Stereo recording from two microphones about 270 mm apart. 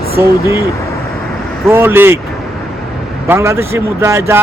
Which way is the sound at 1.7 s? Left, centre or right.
Centre.